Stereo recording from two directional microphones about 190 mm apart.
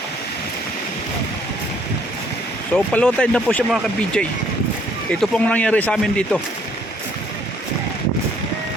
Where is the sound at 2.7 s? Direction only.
5° left (ahead or behind).